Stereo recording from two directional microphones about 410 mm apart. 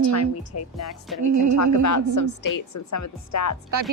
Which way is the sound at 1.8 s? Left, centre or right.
Left.